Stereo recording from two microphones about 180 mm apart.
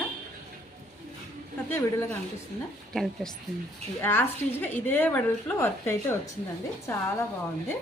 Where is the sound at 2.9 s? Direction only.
Centre (ahead or behind).